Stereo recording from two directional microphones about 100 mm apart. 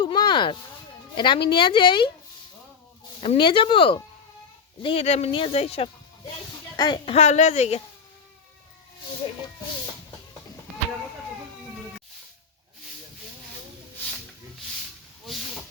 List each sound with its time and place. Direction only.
0.0 s a sound: 50° left (ahead or behind)
1.1 s speech: 55° left (ahead or behind)
3.3 s speech: 55° left (ahead or behind)
4.8 s speech: 70° left (ahead or behind)
6.7 s a woman's voice: 50° left (ahead or behind)
7.0 s a woman's voice: 90° left
9.2 s speech: 55° left (ahead or behind)